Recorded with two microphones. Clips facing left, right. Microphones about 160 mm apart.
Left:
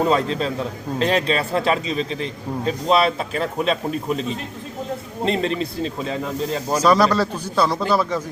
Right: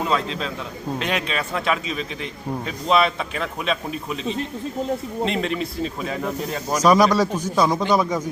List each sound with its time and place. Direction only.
0.0 s a man's voice: 40° left (ahead or behind)
6.8 s speech: 10° right (ahead or behind)